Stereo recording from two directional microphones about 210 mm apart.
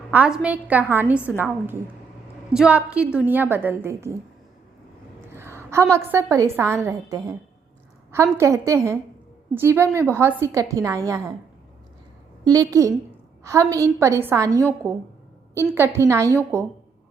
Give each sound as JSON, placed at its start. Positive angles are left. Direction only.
{"t": 0.1, "sound": "a woman's voice", "side_deg": -5}
{"t": 5.4, "sound": "a woman's voice", "side_deg": -10}
{"t": 12.5, "sound": "a woman's voice", "side_deg": -15}